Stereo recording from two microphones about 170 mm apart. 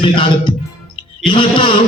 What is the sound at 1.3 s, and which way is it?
Speech, 30° left (ahead or behind).